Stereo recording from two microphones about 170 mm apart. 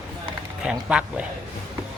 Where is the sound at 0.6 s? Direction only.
5° right (ahead or behind).